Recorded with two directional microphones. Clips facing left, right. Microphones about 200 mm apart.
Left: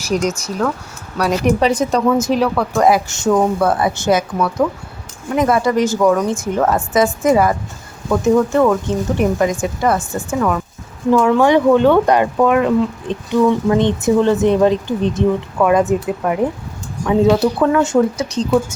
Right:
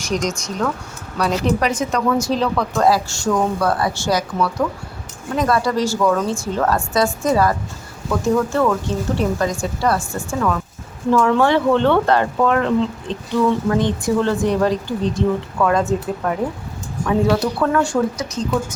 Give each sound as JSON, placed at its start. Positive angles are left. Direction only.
{"t": 0.0, "sound": "speech", "side_deg": 5}
{"t": 1.5, "sound": "a woman's voice", "side_deg": 30}
{"t": 2.1, "sound": "speech", "side_deg": 20}
{"t": 11.1, "sound": "speech", "side_deg": 10}